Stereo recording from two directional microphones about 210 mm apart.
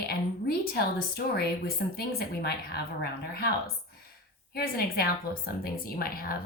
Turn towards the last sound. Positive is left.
turn(degrees=45)  # may be behind; listen again after turning